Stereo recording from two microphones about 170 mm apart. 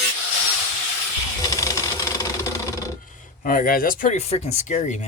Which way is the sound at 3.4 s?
60° left (ahead or behind).